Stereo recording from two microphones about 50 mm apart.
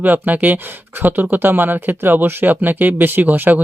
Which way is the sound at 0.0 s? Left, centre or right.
Right.